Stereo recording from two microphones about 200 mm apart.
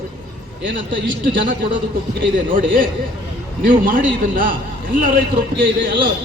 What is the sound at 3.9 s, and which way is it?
A man's voice, 45° right (ahead or behind).